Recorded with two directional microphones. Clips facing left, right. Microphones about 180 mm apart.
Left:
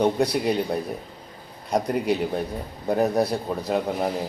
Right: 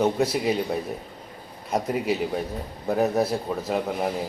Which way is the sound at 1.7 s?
5° right (ahead or behind).